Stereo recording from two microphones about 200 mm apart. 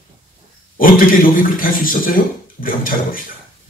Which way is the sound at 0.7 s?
45° left (ahead or behind).